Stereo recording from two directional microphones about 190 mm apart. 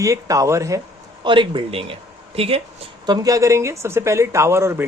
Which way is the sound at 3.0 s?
20° right (ahead or behind).